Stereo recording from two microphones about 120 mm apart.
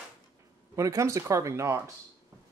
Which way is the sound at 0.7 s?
25° right (ahead or behind).